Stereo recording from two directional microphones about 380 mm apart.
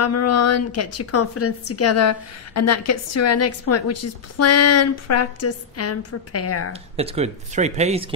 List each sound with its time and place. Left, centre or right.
0.0 s a woman's voice: left
6.7 s speech: centre